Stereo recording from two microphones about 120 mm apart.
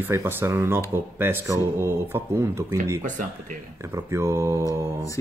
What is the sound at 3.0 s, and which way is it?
Speech, 90° right.